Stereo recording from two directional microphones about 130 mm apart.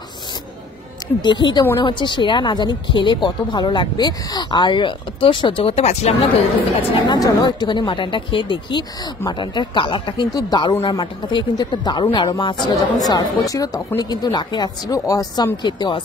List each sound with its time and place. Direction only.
1.2 s speech: 35° left (ahead or behind); by 6.1 s 50° left (ahead or behind)
7.1 s speech: 30° left (ahead or behind)